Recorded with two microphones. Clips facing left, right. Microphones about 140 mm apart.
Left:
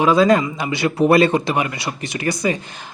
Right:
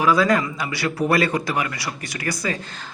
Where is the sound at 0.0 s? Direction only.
25° left (ahead or behind).